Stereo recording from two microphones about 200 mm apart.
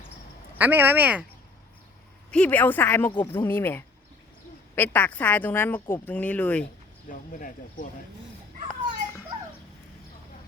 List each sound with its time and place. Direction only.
0.6 s speech: 10° right (ahead or behind)
2.3 s speech: 5° left (ahead or behind)
7.1 s speech: 40° left (ahead or behind)